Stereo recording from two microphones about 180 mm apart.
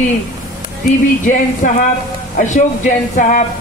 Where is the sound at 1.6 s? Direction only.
45° left (ahead or behind).